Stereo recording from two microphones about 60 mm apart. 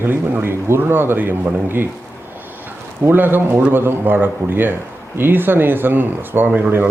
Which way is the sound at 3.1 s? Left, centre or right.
Right.